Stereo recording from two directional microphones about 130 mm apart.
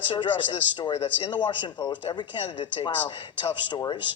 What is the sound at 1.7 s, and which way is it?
Speech, 15° left (ahead or behind).